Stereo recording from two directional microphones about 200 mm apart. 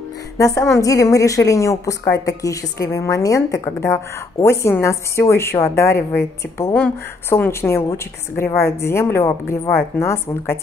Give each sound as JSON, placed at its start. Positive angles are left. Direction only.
{"t": 0.4, "sound": "a woman's voice", "side_deg": 15}